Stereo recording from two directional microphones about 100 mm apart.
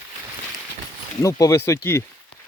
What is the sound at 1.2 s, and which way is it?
Speech, 35° left (ahead or behind).